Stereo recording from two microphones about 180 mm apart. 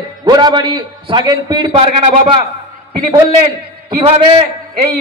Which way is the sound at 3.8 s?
35° right (ahead or behind).